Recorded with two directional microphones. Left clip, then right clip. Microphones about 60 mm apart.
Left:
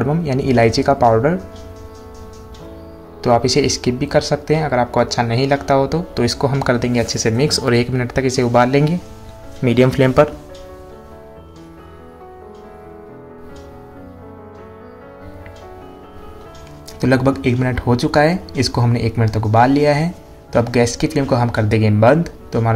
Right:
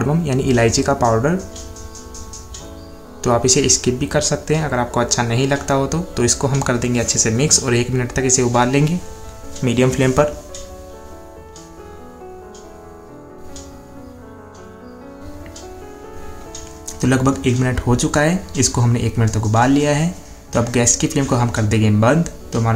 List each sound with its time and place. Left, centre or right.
0.2 s speech: left
3.2 s speech: left
8.0 s speech: left
9.6 s speech: left
10.0 s speech: left
17.0 s speech: left
17.6 s speech: left
20.5 s speech: left
21.5 s speech: left